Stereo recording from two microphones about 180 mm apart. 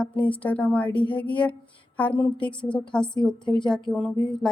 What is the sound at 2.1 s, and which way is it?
Speech, 30° left (ahead or behind).